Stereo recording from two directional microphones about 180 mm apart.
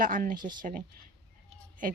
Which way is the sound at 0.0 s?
50° right (ahead or behind).